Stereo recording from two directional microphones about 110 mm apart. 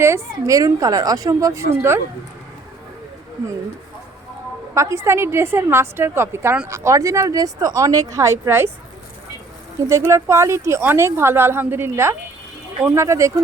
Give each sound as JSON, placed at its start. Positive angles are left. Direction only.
{"t": 0.0, "sound": "a woman's voice", "side_deg": -25}
{"t": 4.7, "sound": "speech", "side_deg": -25}
{"t": 9.9, "sound": "speech", "side_deg": -30}